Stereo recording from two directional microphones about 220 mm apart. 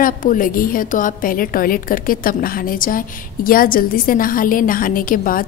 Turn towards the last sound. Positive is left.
turn(degrees=40)  # may be behind; listen again after turning